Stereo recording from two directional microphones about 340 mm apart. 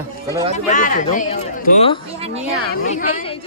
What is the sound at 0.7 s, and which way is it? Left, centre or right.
Speech, left.